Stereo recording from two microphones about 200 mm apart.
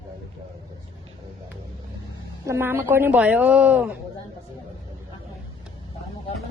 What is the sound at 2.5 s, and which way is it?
A woman's voice, 10° right (ahead or behind).